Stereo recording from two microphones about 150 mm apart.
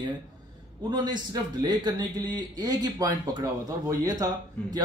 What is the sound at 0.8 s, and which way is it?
Speech, 30° right (ahead or behind).